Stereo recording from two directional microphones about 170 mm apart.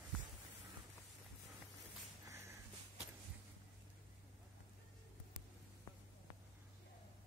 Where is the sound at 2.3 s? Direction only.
15° right (ahead or behind).